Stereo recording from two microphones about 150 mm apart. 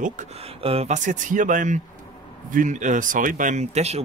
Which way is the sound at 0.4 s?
40° right (ahead or behind).